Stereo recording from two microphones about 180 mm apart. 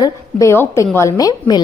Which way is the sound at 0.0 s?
15° left (ahead or behind).